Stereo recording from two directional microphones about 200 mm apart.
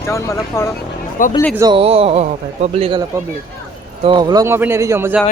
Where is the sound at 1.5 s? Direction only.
20° right (ahead or behind).